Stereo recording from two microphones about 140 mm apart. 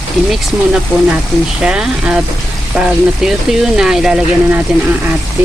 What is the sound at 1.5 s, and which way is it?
Speech, 5° right (ahead or behind).